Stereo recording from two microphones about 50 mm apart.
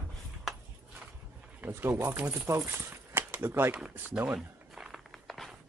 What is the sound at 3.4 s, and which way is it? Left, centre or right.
Speech, right.